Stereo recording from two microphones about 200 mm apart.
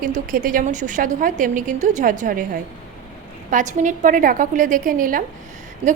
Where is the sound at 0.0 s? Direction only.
40° right (ahead or behind).